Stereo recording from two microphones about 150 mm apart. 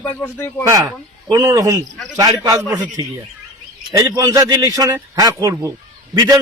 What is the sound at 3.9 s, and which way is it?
A man's voice, 25° right (ahead or behind).